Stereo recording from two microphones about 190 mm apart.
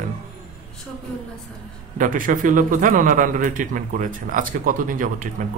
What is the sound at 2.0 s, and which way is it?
Speech, 45° right (ahead or behind).